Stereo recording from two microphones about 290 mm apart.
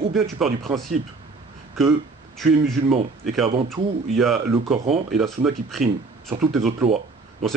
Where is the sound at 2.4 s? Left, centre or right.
Centre.